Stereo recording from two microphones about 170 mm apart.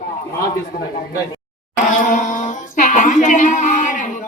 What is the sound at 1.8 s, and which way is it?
Music, 50° left (ahead or behind).